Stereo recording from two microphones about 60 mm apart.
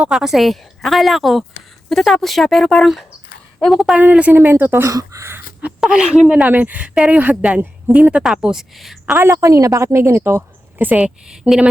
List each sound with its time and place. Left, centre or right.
0.1 s speech: centre
4.0 s speech: right
4.4 s speech: right
4.9 s a woman's voice: right
5.9 s speech: centre
6.5 s speech: right
8.2 s speech: centre
9.1 s a woman's voice: right
10.1 s a woman's voice: right
10.8 s speech: right
11.3 s speech: centre